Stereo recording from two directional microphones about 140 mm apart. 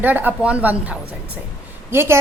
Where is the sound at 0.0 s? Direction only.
10° right (ahead or behind).